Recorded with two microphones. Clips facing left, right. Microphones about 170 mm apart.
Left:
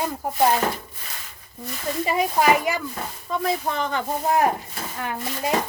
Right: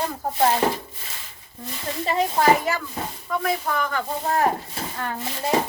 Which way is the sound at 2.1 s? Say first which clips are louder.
Right 1 dB; 10° left (ahead or behind).